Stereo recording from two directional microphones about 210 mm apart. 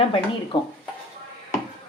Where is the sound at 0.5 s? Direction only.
25° left (ahead or behind).